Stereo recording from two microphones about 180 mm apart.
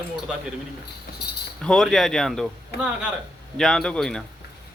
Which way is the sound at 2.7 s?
65° left (ahead or behind).